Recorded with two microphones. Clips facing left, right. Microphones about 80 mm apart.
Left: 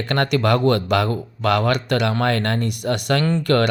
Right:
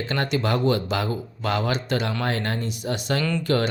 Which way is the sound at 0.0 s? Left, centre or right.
Left.